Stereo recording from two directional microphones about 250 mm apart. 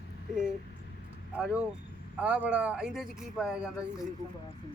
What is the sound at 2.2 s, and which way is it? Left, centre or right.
Speech, centre.